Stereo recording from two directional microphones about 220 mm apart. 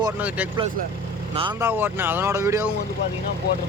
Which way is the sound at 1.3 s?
25° right (ahead or behind).